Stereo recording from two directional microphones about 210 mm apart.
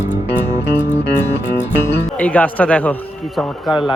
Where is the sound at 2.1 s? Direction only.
5° left (ahead or behind).